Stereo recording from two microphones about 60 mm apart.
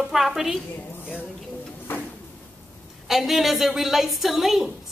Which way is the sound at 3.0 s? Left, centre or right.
Centre.